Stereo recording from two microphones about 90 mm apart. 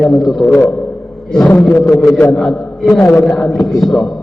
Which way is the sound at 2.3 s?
Centre (ahead or behind).